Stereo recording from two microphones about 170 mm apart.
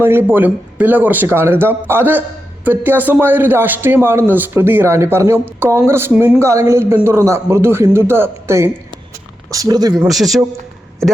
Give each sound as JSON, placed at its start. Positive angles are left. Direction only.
{"t": 0.0, "sound": "a man's voice", "side_deg": -10}
{"t": 10.1, "sound": "a man's voice", "side_deg": 0}